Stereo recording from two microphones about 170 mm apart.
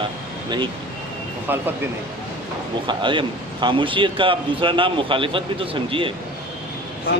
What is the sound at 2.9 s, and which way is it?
Speech, 30° right (ahead or behind).